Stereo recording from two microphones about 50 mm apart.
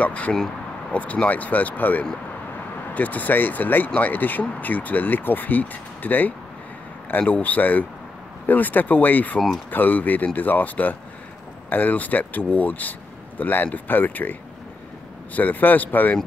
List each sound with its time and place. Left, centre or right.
0.0 s speech: left
15.3 s speech: left